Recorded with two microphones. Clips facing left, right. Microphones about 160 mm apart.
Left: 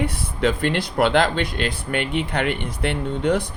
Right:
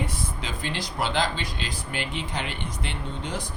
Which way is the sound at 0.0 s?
60° left (ahead or behind).